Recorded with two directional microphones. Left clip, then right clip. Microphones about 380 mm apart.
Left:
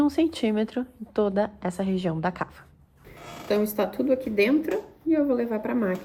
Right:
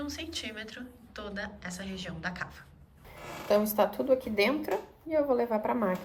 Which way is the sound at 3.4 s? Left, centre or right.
Right.